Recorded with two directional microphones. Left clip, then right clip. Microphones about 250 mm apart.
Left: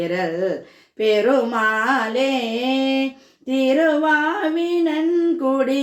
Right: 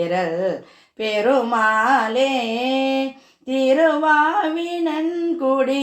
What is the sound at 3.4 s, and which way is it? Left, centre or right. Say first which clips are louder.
Female singing: right 1 dB; centre.